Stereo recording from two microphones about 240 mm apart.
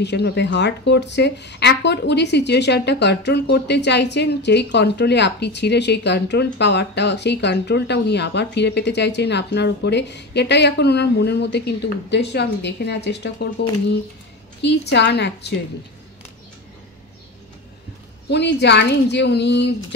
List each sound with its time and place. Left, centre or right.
0.0 s speech: left
18.3 s speech: left